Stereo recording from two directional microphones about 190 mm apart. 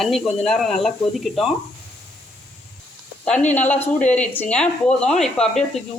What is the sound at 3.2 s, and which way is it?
Speech, 5° left (ahead or behind).